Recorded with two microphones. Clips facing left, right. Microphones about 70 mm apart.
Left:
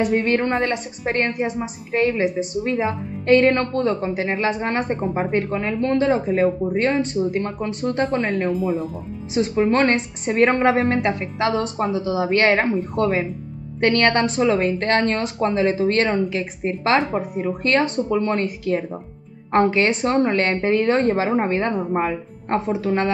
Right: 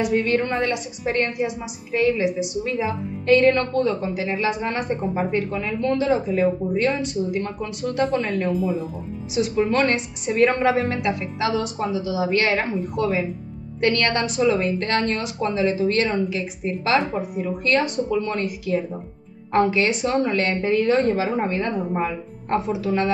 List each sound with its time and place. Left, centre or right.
0.0 s a woman's voice: left
9.3 s a woman's voice: left